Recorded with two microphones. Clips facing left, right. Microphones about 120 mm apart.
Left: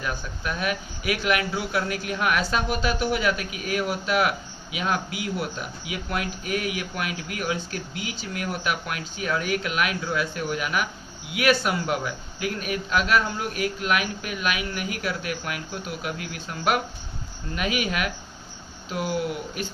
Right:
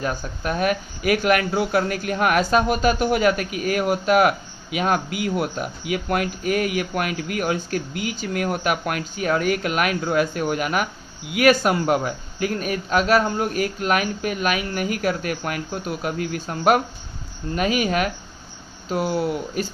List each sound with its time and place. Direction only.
0.0 s a man's voice: 40° right (ahead or behind)